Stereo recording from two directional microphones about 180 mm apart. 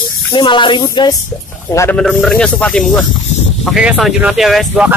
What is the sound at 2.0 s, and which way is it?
Speech, centre (ahead or behind).